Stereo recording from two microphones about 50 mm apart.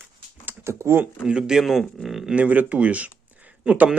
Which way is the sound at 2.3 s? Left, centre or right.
Right.